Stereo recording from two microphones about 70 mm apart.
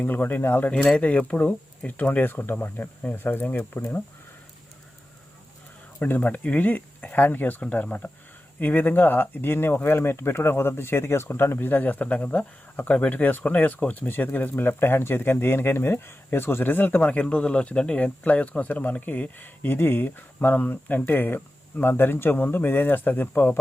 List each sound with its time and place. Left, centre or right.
0.0 s speech: left
0.9 s speech: centre
6.0 s speech: left